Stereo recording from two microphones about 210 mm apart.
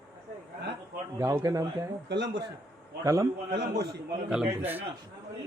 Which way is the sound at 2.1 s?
55° right (ahead or behind).